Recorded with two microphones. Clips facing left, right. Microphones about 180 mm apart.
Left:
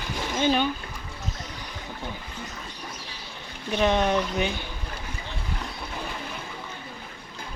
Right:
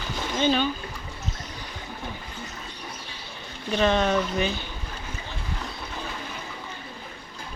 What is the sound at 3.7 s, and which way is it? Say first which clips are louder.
Speech: even; 15° left (ahead or behind).